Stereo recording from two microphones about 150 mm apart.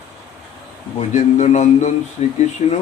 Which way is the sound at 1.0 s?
50° left (ahead or behind).